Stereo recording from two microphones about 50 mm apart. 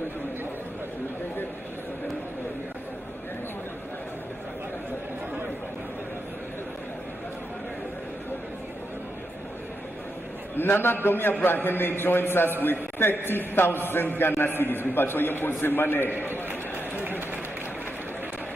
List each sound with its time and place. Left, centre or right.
10.5 s a man's voice: left